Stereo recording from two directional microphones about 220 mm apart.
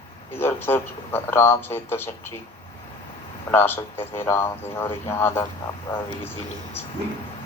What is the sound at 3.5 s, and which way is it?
A man's voice, 10° left (ahead or behind).